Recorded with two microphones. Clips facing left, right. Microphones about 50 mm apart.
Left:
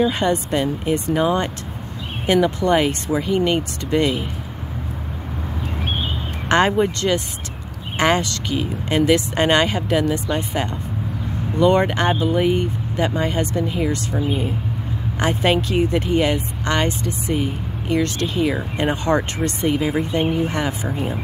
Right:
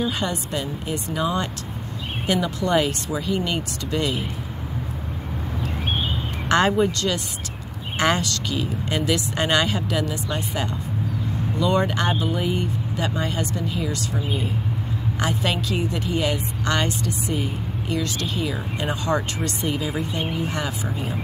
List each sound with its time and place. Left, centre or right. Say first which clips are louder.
0.0 s speech: left 7 dB; left
6.5 s speech: left 2 dB; left